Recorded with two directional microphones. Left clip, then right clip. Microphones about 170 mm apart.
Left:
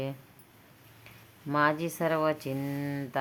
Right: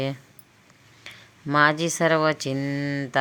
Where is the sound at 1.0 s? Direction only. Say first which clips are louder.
Right 7 dB; 25° right (ahead or behind).